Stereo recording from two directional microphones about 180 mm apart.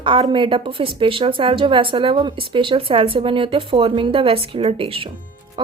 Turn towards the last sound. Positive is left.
turn(degrees=-25)  # may be behind; listen again after turning